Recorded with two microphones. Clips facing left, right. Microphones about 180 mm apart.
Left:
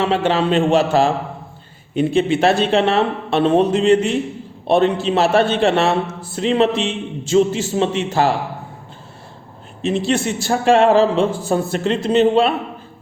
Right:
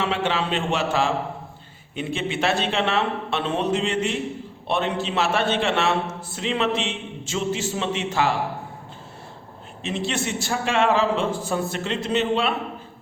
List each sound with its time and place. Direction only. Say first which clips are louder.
0.0 s a man's voice: left 7 dB; 35° left (ahead or behind)
9.8 s a man's voice: left 8 dB; 35° left (ahead or behind)